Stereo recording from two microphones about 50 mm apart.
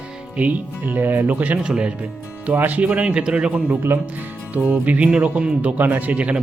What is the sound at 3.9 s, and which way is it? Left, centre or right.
Speech, right.